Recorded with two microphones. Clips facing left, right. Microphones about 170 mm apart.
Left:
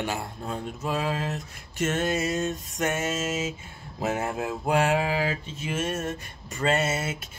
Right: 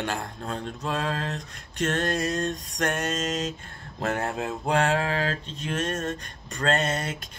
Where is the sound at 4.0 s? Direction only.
5° left (ahead or behind).